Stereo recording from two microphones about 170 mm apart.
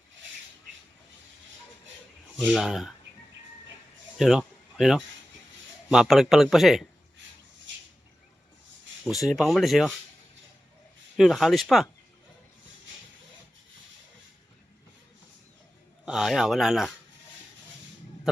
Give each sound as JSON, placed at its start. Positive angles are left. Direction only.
{"t": 2.4, "sound": "speech", "side_deg": 0}
{"t": 4.2, "sound": "speech", "side_deg": 0}
{"t": 9.2, "sound": "speech", "side_deg": 0}
{"t": 11.2, "sound": "speech", "side_deg": 0}
{"t": 16.0, "sound": "speech", "side_deg": -5}